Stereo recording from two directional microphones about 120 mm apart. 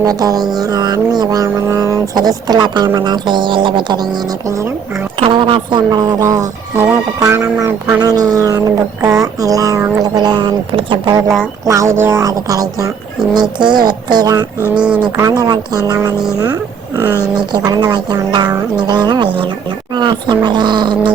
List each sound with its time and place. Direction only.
0.0 s speech: 30° right (ahead or behind)
4.4 s speech: 25° right (ahead or behind)
5.2 s speech: 45° right (ahead or behind)
11.6 s speech: 25° right (ahead or behind)
17.3 s speech: 35° right (ahead or behind)